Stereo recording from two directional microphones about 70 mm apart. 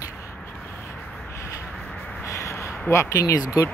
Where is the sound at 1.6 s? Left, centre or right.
Centre.